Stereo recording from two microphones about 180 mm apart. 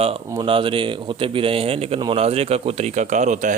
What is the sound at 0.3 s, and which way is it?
Speech, 25° right (ahead or behind).